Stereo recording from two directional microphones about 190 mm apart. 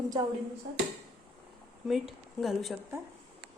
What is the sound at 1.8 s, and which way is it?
Speech, centre (ahead or behind).